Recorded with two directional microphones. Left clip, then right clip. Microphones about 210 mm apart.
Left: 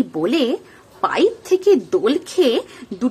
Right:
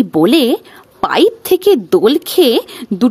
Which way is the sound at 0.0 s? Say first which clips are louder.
Right 8 dB; 45° right (ahead or behind).